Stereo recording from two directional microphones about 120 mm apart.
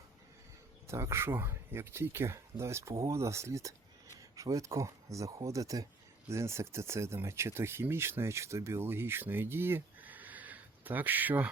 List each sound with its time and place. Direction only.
0.9 s speech: 25° right (ahead or behind)